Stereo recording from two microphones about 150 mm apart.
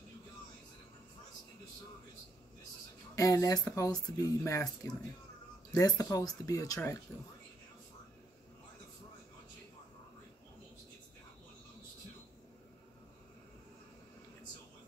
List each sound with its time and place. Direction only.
3.2 s speech: 20° left (ahead or behind)